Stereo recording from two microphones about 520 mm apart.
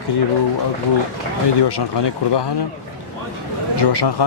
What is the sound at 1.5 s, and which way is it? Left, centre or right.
Speech, left.